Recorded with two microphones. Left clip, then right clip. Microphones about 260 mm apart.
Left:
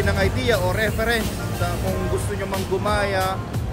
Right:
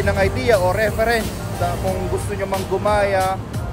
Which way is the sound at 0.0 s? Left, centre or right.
Centre.